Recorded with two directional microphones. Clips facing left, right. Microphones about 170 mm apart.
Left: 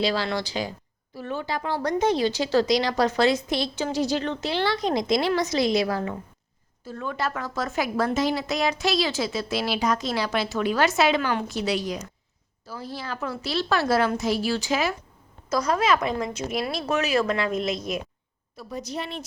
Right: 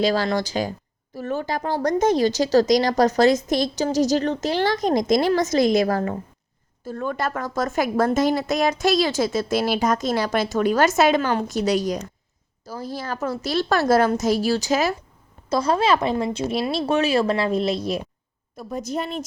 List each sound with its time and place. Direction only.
0.0 s a woman's voice: 45° right (ahead or behind)
15.4 s speech: 30° right (ahead or behind)
18.5 s a woman's voice: 50° right (ahead or behind)